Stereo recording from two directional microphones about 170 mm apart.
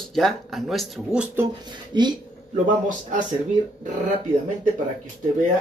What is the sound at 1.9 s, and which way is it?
Speech, 25° right (ahead or behind).